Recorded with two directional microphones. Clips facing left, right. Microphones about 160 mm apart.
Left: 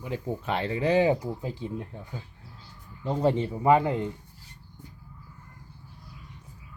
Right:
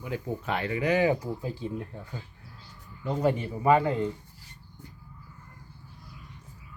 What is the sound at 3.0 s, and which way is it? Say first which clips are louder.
Speech: left 2 dB; 25° left (ahead or behind).